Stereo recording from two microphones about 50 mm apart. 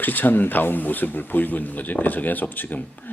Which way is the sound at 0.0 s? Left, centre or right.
Left.